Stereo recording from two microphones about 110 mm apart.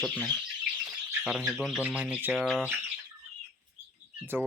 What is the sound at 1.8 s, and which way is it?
Speech, 15° right (ahead or behind).